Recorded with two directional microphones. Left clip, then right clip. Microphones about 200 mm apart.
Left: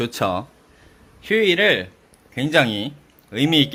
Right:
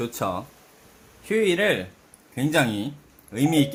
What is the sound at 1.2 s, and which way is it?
Speech, 10° left (ahead or behind).